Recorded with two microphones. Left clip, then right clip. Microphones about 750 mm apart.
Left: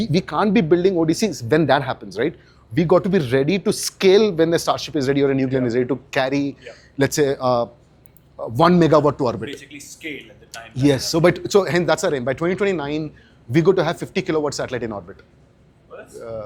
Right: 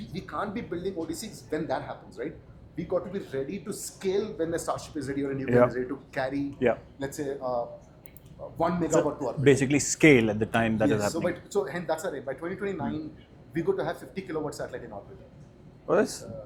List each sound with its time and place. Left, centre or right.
0.1 s speech: left
7.0 s speech: left
9.4 s speech: right
10.8 s speech: left